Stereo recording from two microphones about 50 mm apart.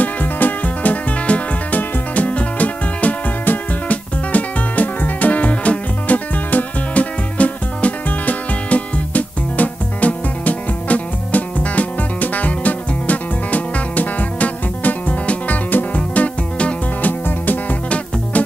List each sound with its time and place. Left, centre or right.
0.0 s music: left